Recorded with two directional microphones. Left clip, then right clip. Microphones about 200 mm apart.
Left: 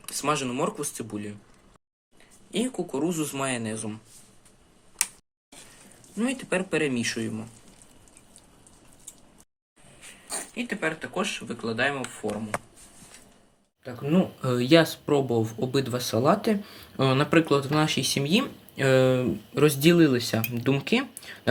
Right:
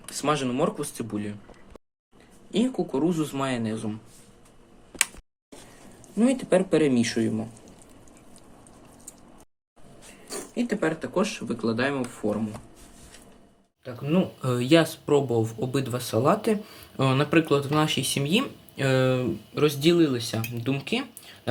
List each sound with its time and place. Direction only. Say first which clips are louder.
0.0 s speech: right 1 dB; 10° left (ahead or behind)
2.5 s speech: right 3 dB; 10° left (ahead or behind)
6.1 s speech: right 6 dB; 10° left (ahead or behind)
10.3 s speech: right 3 dB; 5° left (ahead or behind)
13.8 s speech: even; centre (ahead or behind)
19.5 s speech: left 1 dB; 20° left (ahead or behind)